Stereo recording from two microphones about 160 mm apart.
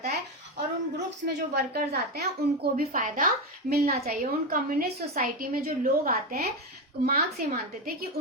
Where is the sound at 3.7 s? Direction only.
80° right.